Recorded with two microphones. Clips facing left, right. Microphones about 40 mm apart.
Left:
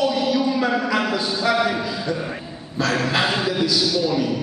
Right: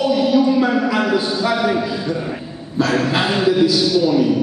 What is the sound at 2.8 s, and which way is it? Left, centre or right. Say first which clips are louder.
A man's voice: right 3 dB; centre.